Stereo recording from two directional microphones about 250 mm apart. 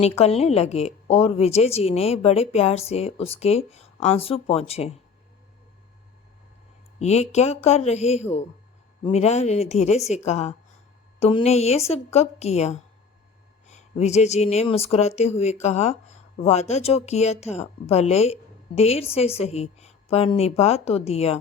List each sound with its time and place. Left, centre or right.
0.0 s speech: left
7.0 s speech: left